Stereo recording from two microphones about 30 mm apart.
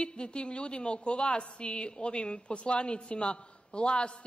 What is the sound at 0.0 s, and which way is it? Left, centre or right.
A woman's voice, left.